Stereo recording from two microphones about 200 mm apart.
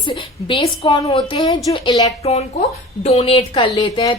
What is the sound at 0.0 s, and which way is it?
A woman's voice, 25° left (ahead or behind).